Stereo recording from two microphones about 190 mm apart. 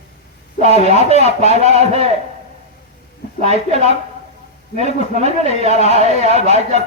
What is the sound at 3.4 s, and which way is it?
Speech, 35° right (ahead or behind).